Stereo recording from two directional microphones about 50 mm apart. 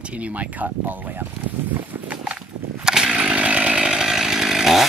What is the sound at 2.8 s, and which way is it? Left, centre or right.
Chainsaw, centre.